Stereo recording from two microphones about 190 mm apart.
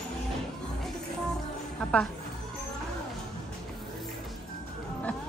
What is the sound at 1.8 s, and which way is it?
Music, 5° left (ahead or behind).